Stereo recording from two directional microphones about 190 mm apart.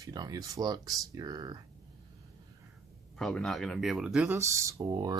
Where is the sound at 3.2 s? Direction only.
Centre (ahead or behind).